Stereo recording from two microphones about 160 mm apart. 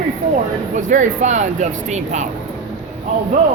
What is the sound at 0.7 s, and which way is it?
Speech, 50° right (ahead or behind).